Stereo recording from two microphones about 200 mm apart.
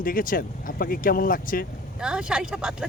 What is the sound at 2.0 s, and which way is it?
Speech, 5° right (ahead or behind).